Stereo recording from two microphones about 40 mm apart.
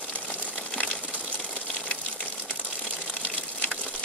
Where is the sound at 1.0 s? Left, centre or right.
Right.